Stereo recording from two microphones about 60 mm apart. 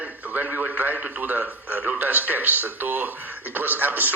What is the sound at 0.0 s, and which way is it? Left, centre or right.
A man's voice, right.